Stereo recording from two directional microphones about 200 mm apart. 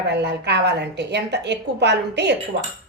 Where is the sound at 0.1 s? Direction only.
55° right (ahead or behind).